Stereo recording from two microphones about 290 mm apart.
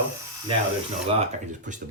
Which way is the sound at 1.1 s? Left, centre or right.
Right.